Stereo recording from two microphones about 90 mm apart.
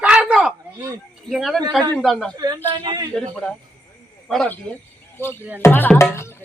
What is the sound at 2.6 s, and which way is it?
Speech, 60° right (ahead or behind).